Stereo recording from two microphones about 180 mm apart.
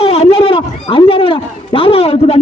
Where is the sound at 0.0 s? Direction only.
35° left (ahead or behind).